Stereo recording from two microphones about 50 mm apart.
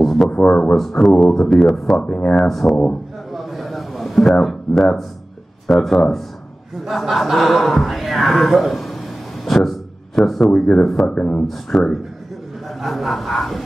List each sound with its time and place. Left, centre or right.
0.0 s a sound: centre
0.3 s speech: centre
0.7 s speech: centre
2.0 s speech: left
2.4 s speech: centre
2.7 s speech: left
3.3 s a sound: centre
5.7 s speech: centre
9.4 s a sound: centre
10.5 s speech: centre
11.7 s speech: centre